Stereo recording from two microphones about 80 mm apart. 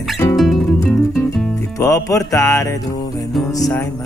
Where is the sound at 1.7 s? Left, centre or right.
Left.